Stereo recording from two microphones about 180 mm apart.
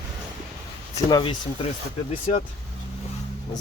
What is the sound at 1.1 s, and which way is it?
Speech, 25° left (ahead or behind).